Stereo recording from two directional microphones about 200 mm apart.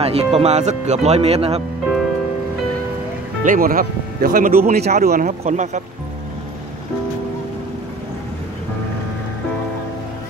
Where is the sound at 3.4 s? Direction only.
45° right (ahead or behind).